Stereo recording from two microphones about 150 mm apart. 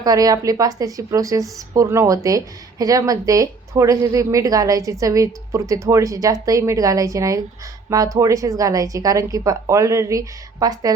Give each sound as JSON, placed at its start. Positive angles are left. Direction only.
{"t": 0.0, "sound": "a woman's voice", "side_deg": -25}